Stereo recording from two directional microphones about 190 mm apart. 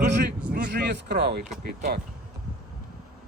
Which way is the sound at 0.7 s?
65° right (ahead or behind).